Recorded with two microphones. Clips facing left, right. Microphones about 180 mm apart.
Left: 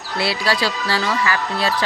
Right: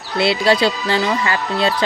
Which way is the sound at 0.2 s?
25° right (ahead or behind).